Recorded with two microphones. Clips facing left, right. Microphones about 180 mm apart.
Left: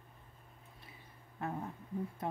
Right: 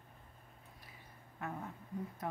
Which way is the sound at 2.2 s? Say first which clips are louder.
Left 2 dB; 25° left (ahead or behind).